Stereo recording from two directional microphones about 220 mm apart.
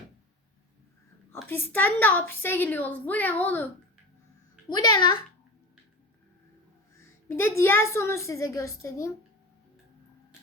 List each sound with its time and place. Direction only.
1.5 s a woman's voice: 10° left (ahead or behind)
4.7 s a child's voice: 20° left (ahead or behind)
7.3 s a woman's voice: 10° left (ahead or behind)